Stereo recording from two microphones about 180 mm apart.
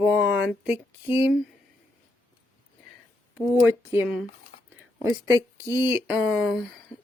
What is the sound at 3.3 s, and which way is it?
Speech, 15° right (ahead or behind).